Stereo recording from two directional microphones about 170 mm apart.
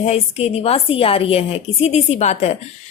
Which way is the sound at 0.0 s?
35° left (ahead or behind).